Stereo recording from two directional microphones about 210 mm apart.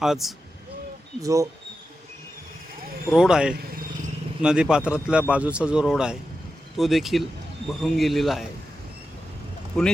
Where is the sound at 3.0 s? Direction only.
5° right (ahead or behind).